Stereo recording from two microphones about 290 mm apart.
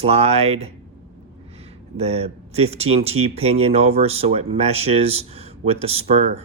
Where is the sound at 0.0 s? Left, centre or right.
Right.